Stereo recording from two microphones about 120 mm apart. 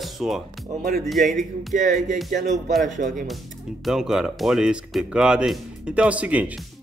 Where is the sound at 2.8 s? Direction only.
90° right.